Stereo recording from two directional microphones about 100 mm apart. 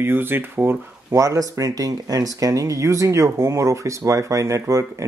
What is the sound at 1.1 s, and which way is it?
Speech, 30° right (ahead or behind).